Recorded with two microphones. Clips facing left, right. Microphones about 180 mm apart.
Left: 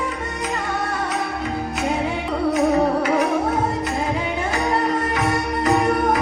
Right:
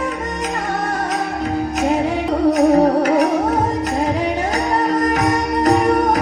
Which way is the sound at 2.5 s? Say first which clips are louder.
Right 4 dB; 40° right (ahead or behind).